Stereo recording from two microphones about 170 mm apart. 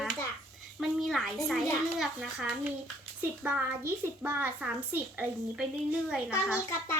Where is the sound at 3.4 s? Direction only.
15° right (ahead or behind).